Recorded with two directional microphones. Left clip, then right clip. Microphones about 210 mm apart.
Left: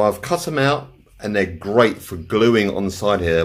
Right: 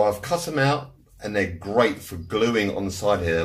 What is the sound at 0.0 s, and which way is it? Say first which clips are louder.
Speech: left 3 dB; 50° left (ahead or behind).